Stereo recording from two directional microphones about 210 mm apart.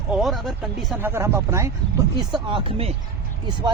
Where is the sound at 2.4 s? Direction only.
25° right (ahead or behind).